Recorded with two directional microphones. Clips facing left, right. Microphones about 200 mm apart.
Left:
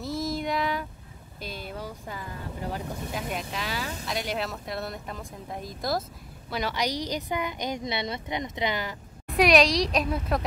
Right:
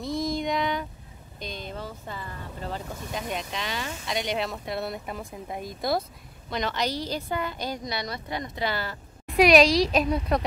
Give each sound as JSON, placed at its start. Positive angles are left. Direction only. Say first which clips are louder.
{"t": 0.0, "sound": "child singing", "louder": "right 2 dB", "side_deg": 5}
{"t": 1.4, "sound": "speech", "louder": "right 1 dB", "side_deg": 5}
{"t": 6.5, "sound": "speech", "louder": "right 1 dB", "side_deg": 10}
{"t": 9.3, "sound": "speech", "louder": "right 3 dB", "side_deg": 0}